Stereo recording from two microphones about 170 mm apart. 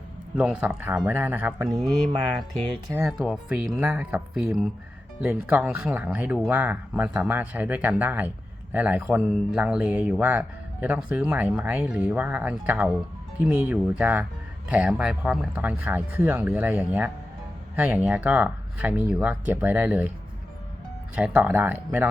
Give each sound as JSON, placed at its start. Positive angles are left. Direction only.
{"t": 0.3, "sound": "speech", "side_deg": -5}
{"t": 2.9, "sound": "speech", "side_deg": -15}
{"t": 3.2, "sound": "speech", "side_deg": -5}
{"t": 21.2, "sound": "speech", "side_deg": -5}